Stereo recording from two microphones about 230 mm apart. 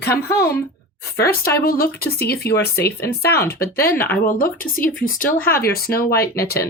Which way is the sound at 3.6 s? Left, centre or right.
Left.